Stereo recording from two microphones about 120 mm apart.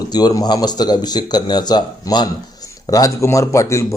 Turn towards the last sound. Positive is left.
turn(degrees=25)  # may be behind; listen again after turning